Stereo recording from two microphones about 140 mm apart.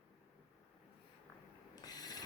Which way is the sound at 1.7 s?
25° left (ahead or behind).